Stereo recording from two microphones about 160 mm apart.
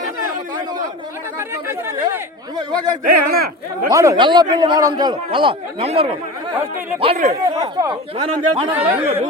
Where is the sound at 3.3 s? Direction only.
70° right (ahead or behind).